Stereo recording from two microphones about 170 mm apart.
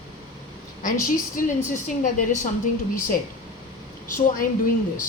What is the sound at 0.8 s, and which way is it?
A woman's voice, 50° left (ahead or behind).